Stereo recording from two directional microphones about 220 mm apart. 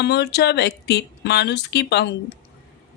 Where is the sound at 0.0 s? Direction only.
50° left (ahead or behind).